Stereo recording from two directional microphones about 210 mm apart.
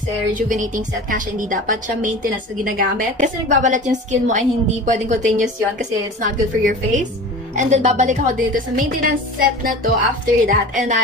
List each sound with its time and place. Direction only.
0.4 s a woman's voice: 40° right (ahead or behind)